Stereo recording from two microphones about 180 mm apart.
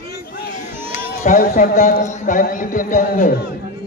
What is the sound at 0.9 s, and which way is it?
A man's voice, 45° left (ahead or behind).